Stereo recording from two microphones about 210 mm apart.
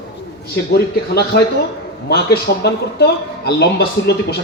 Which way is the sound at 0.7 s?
45° left (ahead or behind).